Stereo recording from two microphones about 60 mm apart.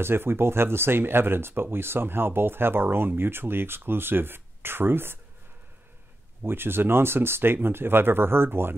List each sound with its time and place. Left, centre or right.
0.0 s speech: right
6.4 s speech: right